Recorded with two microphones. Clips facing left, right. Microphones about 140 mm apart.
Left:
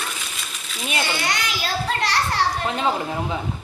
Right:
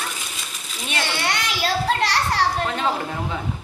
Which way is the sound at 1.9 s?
35° right (ahead or behind).